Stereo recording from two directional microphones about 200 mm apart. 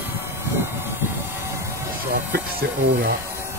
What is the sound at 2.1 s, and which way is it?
Speech, 45° right (ahead or behind).